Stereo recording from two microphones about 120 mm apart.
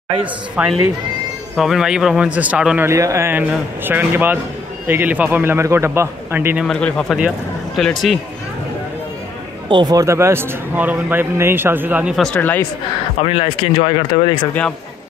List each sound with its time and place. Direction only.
0.6 s a man's voice: 5° right (ahead or behind)
2.9 s a man's voice: 25° right (ahead or behind)
6.6 s speech: 5° left (ahead or behind)
7.2 s speech: 10° right (ahead or behind)
9.7 s speech: 40° right (ahead or behind)
9.9 s a man's voice: 25° right (ahead or behind)
12.4 s speech: 15° left (ahead or behind)
13.2 s speech: 50° left (ahead or behind)